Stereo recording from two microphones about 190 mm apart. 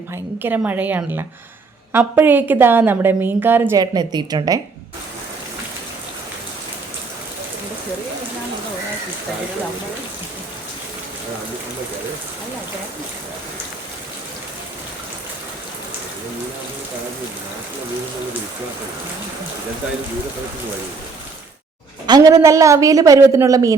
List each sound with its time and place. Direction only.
0.1 s a woman's voice: 10° right (ahead or behind)
22.0 s a woman's voice: 20° right (ahead or behind)